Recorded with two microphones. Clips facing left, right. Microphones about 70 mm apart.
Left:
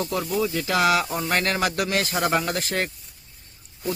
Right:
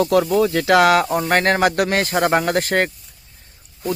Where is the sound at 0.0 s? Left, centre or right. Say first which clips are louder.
Right 9 dB; right.